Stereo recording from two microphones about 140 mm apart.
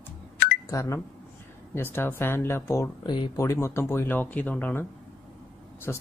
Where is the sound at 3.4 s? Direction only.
20° left (ahead or behind).